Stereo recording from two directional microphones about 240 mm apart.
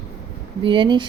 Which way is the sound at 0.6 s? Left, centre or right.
Centre.